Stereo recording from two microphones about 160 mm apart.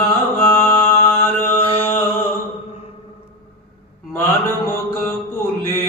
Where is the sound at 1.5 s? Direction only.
35° left (ahead or behind).